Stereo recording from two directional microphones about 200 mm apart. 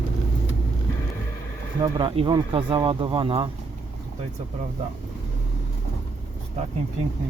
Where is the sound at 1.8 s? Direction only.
25° right (ahead or behind).